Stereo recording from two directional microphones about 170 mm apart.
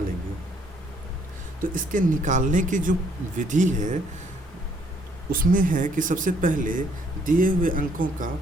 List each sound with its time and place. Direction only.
1.7 s speech: 50° right (ahead or behind)
5.3 s speech: 55° right (ahead or behind)